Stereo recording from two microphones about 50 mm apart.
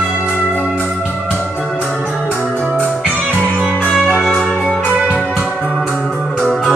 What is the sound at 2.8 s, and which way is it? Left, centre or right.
Music, right.